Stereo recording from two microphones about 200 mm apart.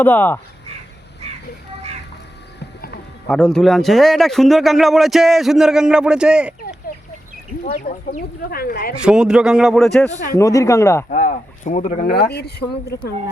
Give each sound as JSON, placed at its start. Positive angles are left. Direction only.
{"t": 0.0, "sound": "speech", "side_deg": 10}
{"t": 2.6, "sound": "a sound", "side_deg": 55}
{"t": 3.2, "sound": "speech", "side_deg": 5}
{"t": 7.9, "sound": "speech", "side_deg": 35}
{"t": 8.4, "sound": "speech", "side_deg": 50}
{"t": 9.0, "sound": "speech", "side_deg": -5}
{"t": 10.3, "sound": "speech", "side_deg": 15}
{"t": 11.1, "sound": "speech", "side_deg": 40}